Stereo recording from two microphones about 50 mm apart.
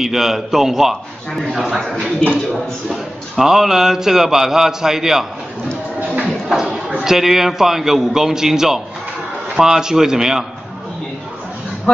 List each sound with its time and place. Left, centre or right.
0.0 s a man's voice: centre
2.0 s speech: left
2.9 s a man's voice: centre
6.5 s a sound: centre
7.0 s a man's voice: centre